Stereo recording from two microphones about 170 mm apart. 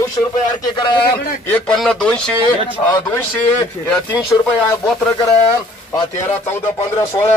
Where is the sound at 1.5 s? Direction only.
5° left (ahead or behind).